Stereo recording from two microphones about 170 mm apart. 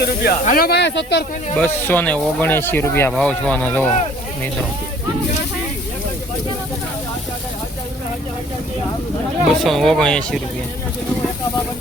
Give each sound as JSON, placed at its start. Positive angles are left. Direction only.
{"t": 0.0, "sound": "speech", "side_deg": 65}
{"t": 1.5, "sound": "speech", "side_deg": 10}
{"t": 3.1, "sound": "speech", "side_deg": 5}
{"t": 9.6, "sound": "speech", "side_deg": 0}